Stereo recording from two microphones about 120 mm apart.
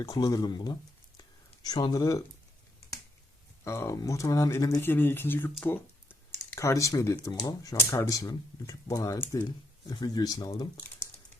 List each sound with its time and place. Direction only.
0.0 s speech: 30° left (ahead or behind)
3.6 s speech: 20° left (ahead or behind)
4.8 s speech: 20° left (ahead or behind)
9.8 s speech: 35° left (ahead or behind)